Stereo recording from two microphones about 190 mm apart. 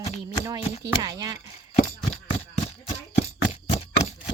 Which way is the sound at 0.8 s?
20° right (ahead or behind).